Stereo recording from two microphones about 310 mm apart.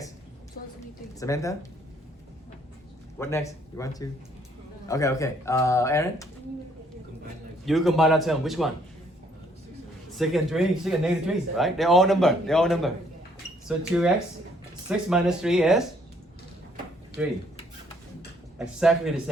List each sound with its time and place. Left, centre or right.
1.2 s speech: centre
3.2 s speech: centre
7.6 s speech: centre
10.2 s speech: centre
17.1 s speech: left
18.6 s speech: centre